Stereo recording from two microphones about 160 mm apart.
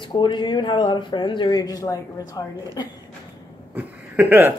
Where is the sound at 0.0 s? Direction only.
30° left (ahead or behind).